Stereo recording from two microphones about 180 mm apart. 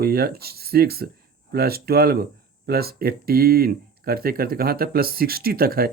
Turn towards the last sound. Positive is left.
turn(degrees=-55)  # may be behind; listen again after turning